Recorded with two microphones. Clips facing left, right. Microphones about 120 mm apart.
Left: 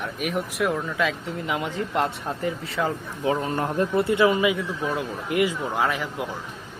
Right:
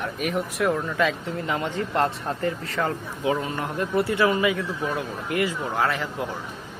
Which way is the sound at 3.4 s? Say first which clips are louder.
Left 4 dB; 35° left (ahead or behind).